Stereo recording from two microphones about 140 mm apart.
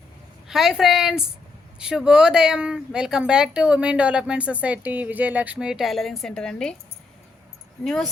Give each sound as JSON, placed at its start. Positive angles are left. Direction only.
{"t": 0.4, "sound": "speech", "side_deg": -5}